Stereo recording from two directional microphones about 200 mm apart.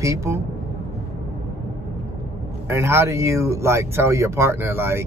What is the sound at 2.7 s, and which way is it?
Speech, 15° right (ahead or behind).